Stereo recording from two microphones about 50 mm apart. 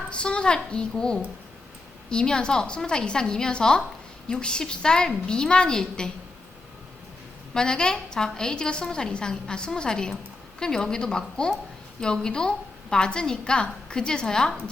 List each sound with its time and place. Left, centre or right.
0.1 s a woman's voice: centre
7.5 s a woman's voice: centre